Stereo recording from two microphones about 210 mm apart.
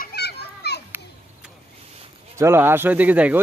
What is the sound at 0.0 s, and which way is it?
Children playing, 50° left (ahead or behind).